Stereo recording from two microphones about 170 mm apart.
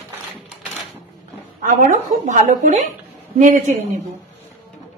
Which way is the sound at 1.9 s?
45° right (ahead or behind).